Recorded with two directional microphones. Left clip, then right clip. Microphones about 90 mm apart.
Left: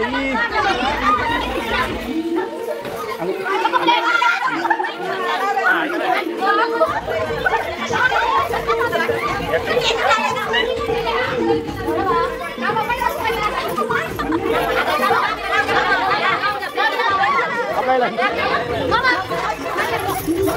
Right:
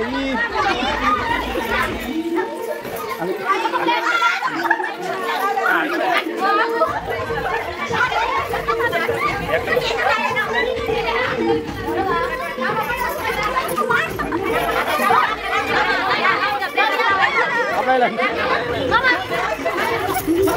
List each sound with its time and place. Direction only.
6.4 s chatter: 10° right (ahead or behind)
17.2 s chatter: 20° right (ahead or behind)
18.9 s chatter: 40° left (ahead or behind)